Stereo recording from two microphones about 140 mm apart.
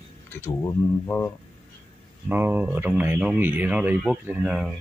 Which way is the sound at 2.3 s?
15° right (ahead or behind).